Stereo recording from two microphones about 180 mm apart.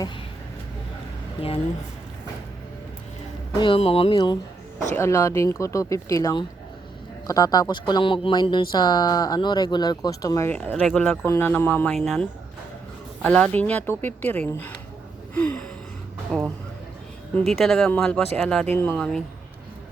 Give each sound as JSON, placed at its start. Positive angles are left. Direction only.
{"t": 1.4, "sound": "a woman's voice", "side_deg": 30}
{"t": 3.6, "sound": "speech", "side_deg": 30}